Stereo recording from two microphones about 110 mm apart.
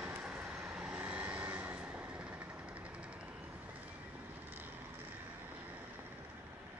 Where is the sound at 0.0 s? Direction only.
15° right (ahead or behind).